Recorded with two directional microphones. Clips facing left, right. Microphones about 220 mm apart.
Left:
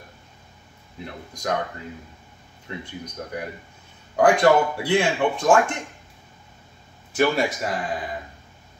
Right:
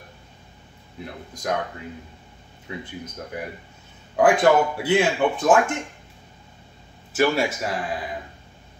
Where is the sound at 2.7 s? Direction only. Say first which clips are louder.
Right 1 dB; 5° right (ahead or behind).